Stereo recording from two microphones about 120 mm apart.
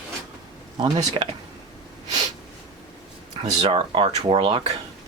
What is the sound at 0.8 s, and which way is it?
Speech, 40° right (ahead or behind).